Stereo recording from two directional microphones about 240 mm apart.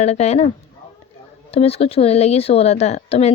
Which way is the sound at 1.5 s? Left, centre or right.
Left.